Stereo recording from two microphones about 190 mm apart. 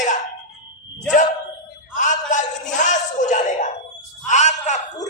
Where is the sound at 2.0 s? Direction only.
40° left (ahead or behind).